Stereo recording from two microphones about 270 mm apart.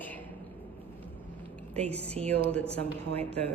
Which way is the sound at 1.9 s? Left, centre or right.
Right.